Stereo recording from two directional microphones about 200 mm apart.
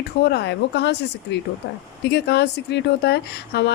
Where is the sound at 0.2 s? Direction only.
55° left (ahead or behind).